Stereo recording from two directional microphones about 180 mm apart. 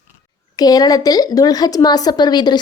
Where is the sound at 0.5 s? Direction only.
20° left (ahead or behind).